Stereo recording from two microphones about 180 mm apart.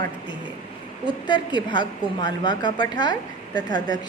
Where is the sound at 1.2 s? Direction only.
25° left (ahead or behind).